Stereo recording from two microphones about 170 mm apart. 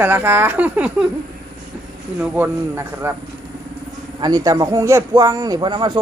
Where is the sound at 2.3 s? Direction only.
10° right (ahead or behind).